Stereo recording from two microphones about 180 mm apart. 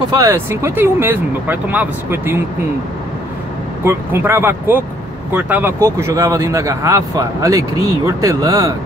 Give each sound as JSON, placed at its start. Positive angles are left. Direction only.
{"t": 0.2, "sound": "speech", "side_deg": -15}
{"t": 3.8, "sound": "speech", "side_deg": -15}